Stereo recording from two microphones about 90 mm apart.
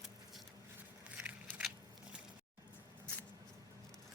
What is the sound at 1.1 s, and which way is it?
Crackle, 15° right (ahead or behind).